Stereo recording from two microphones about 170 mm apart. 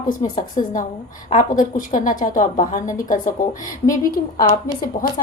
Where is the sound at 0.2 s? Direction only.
50° left (ahead or behind).